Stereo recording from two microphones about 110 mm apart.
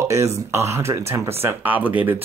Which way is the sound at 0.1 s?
25° right (ahead or behind).